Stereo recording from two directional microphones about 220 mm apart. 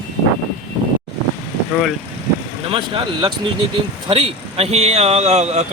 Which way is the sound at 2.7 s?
20° right (ahead or behind).